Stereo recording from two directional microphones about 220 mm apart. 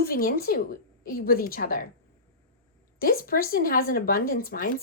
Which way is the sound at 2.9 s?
40° left (ahead or behind).